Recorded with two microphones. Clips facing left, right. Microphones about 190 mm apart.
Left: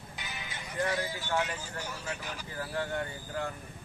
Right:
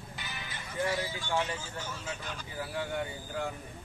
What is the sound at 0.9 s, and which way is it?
Speech, 15° right (ahead or behind).